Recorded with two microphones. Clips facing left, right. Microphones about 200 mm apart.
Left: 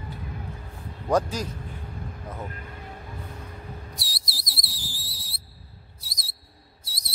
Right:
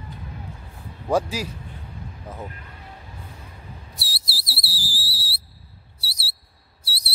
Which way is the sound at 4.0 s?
5° right (ahead or behind).